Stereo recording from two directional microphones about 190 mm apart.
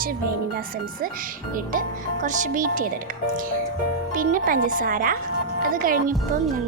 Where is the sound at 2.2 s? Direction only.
40° right (ahead or behind).